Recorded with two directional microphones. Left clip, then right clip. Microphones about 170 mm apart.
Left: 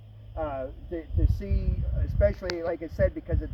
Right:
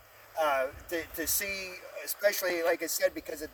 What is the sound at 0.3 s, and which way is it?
Speech, 25° right (ahead or behind).